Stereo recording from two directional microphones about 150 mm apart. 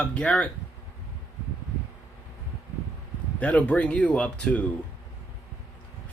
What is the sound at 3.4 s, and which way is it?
Speech, 10° left (ahead or behind).